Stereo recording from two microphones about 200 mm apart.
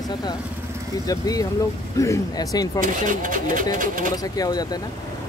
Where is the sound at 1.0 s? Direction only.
20° left (ahead or behind).